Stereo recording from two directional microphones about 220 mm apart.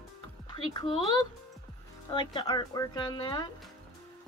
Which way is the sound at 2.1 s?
20° left (ahead or behind).